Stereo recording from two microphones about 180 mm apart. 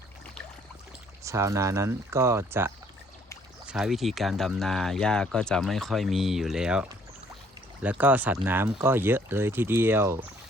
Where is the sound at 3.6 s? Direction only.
Centre (ahead or behind).